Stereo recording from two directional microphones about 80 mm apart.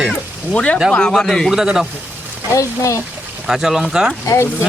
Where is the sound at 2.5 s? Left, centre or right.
Left.